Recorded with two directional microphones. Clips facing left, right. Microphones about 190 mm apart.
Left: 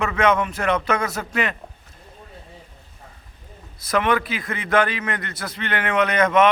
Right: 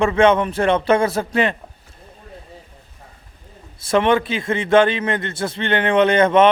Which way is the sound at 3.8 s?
25° right (ahead or behind).